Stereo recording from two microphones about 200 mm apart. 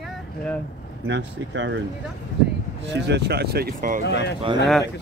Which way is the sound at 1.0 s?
65° right (ahead or behind).